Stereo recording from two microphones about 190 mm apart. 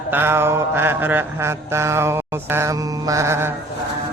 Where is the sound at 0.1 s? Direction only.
10° right (ahead or behind).